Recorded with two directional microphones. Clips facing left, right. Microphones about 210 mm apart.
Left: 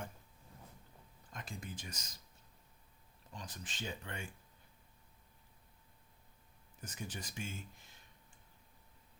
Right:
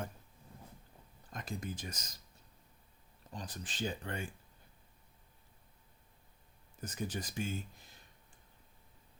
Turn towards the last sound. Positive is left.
turn(degrees=-35)  # may be behind; listen again after turning